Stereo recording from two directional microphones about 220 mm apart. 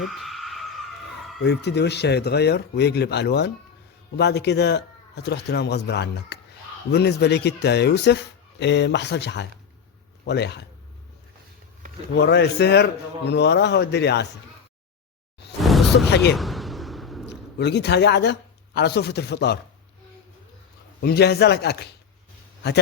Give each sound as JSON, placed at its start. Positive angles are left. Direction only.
{"t": 0.0, "sound": "skidding", "side_deg": 0}
{"t": 1.5, "sound": "speech", "side_deg": 50}
{"t": 12.1, "sound": "speech", "side_deg": 50}
{"t": 16.0, "sound": "speech", "side_deg": 50}
{"t": 16.3, "sound": "a sound", "side_deg": 0}
{"t": 17.2, "sound": "a man's voice", "side_deg": 50}
{"t": 21.0, "sound": "speech", "side_deg": 50}